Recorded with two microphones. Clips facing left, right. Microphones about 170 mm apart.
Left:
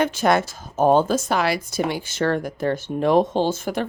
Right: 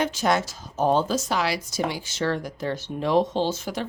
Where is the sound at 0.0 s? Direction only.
55° left (ahead or behind).